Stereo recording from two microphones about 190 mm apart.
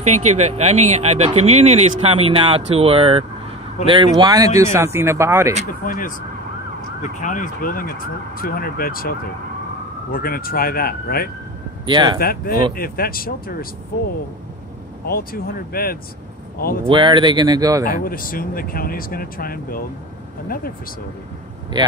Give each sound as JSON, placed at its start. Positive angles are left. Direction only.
{"t": 0.0, "sound": "speech", "side_deg": -35}
{"t": 5.9, "sound": "speech", "side_deg": 45}
{"t": 10.1, "sound": "speech", "side_deg": 50}
{"t": 11.8, "sound": "speech", "side_deg": -25}
{"t": 12.2, "sound": "speech", "side_deg": 50}
{"t": 15.0, "sound": "speech", "side_deg": 50}
{"t": 16.8, "sound": "speech", "side_deg": -25}
{"t": 17.8, "sound": "speech", "side_deg": 50}